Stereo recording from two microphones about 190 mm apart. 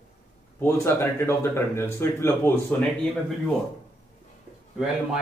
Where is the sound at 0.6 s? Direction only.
15° left (ahead or behind).